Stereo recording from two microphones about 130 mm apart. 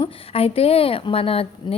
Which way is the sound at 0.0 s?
50° left (ahead or behind).